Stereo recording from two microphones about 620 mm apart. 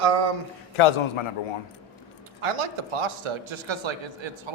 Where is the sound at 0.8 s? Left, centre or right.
Left.